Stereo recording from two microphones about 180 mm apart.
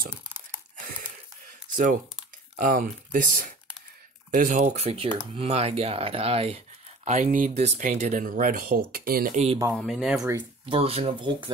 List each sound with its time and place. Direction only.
0.7 s a sound: 45° right (ahead or behind)
1.7 s speech: 50° right (ahead or behind)
7.1 s speech: 45° right (ahead or behind)
9.8 s speech: centre (ahead or behind)
10.6 s speech: 30° right (ahead or behind)